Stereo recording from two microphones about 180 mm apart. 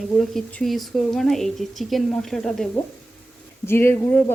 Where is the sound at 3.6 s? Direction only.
15° left (ahead or behind).